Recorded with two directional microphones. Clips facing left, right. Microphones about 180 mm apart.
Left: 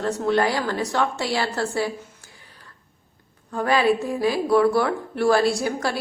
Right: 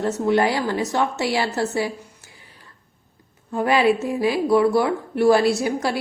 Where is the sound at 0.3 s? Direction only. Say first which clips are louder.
Right 2 dB; 20° right (ahead or behind).